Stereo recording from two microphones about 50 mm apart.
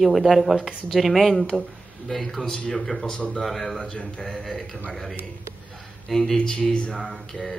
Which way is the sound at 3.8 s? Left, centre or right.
Left.